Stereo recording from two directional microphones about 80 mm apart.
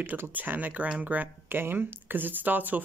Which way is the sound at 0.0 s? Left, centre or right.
Right.